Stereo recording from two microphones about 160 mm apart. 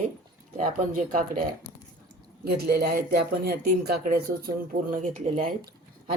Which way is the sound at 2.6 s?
80° right.